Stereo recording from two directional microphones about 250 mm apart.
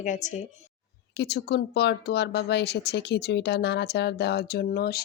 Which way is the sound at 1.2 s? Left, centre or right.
Left.